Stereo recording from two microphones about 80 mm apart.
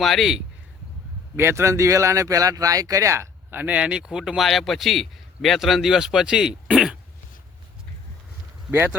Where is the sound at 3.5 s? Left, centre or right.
Right.